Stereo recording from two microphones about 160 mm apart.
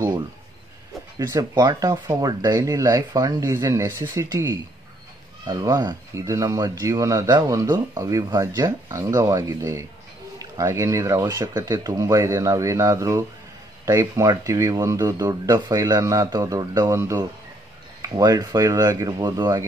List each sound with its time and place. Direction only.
1.1 s speech: 25° right (ahead or behind)